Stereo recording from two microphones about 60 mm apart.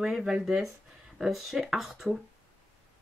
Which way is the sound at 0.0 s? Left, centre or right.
Centre.